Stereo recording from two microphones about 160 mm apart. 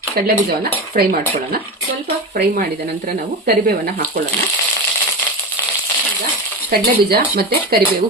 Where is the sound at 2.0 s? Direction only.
65° right (ahead or behind).